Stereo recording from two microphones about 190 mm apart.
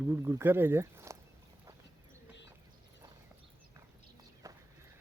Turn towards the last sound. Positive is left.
turn(degrees=-15)  # may be behind; listen again after turning